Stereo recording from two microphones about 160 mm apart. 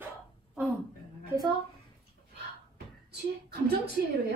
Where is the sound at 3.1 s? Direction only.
90° right.